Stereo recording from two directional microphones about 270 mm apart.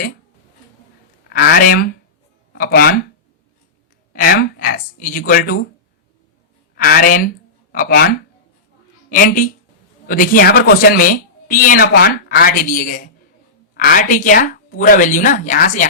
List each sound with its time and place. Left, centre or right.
1.3 s speech: left
4.1 s speech: left
6.7 s a woman's voice: left